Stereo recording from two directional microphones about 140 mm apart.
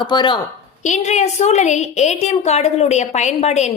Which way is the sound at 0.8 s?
60° left (ahead or behind).